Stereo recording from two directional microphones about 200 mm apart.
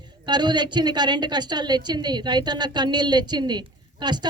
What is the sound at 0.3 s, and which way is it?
A man's voice, 20° right (ahead or behind).